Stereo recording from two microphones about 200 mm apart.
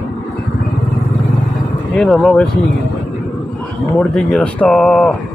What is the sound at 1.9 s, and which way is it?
Speech, centre (ahead or behind).